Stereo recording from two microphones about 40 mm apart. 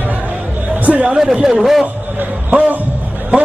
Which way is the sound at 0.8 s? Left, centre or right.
Right.